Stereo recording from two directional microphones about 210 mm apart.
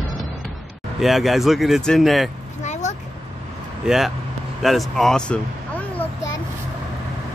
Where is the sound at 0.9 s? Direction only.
Centre (ahead or behind).